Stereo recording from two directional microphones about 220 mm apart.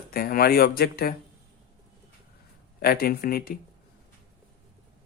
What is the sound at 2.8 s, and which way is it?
Speech, 45° left (ahead or behind).